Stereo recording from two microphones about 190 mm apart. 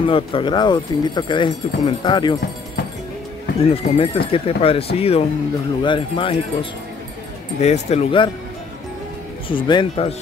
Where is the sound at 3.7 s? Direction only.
30° left (ahead or behind).